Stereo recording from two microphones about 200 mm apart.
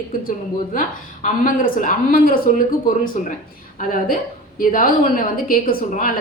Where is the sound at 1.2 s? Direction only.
45° left (ahead or behind).